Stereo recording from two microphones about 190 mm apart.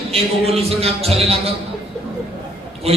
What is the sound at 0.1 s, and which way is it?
Speech, 30° right (ahead or behind).